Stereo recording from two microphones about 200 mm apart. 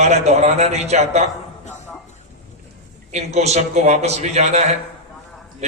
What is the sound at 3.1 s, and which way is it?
A man's voice, 35° right (ahead or behind).